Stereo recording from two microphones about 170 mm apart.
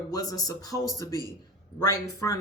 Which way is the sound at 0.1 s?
20° left (ahead or behind).